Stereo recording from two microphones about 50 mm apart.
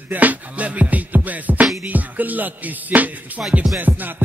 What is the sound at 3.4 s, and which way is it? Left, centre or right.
Music, right.